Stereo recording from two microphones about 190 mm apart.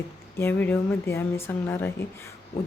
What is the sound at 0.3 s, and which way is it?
A woman's voice, 10° left (ahead or behind).